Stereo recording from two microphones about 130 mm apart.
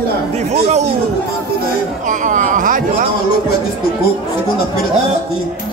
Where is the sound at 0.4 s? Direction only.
60° right (ahead or behind).